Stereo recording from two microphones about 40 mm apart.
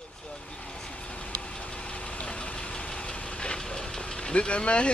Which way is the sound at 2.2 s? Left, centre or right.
Left.